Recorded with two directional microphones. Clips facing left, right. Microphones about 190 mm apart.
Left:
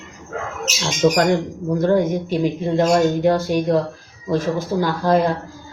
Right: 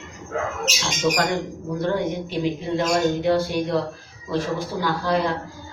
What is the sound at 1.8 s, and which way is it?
Speech, 45° left (ahead or behind).